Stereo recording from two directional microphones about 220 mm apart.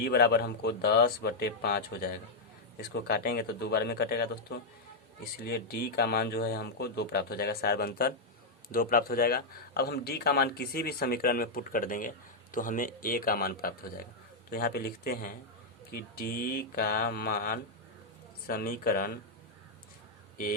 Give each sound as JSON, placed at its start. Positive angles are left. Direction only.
{"t": 0.0, "sound": "speech", "side_deg": 45}
{"t": 16.7, "sound": "mantra", "side_deg": 40}
{"t": 18.4, "sound": "speech", "side_deg": 45}